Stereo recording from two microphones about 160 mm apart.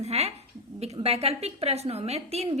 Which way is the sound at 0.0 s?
40° right (ahead or behind).